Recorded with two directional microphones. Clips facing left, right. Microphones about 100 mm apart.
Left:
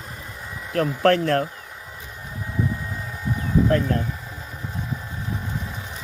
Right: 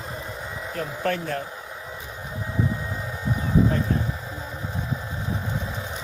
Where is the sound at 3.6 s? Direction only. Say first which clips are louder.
Left 4 dB; 90° left.